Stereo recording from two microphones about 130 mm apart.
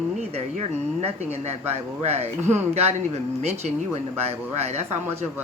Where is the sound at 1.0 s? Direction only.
55° right (ahead or behind).